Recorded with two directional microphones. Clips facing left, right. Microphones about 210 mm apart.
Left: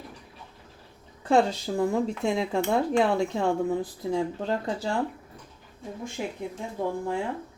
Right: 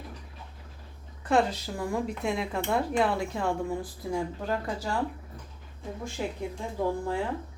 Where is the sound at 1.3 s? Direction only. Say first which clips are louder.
Left 3 dB; 30° left (ahead or behind).